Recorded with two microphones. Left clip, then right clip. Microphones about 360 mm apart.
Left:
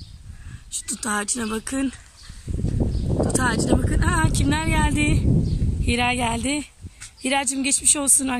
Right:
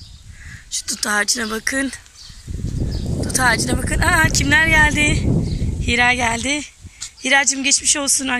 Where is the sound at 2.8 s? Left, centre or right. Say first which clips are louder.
Left 2 dB; left.